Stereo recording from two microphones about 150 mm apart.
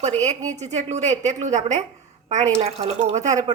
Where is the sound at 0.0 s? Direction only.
50° right (ahead or behind).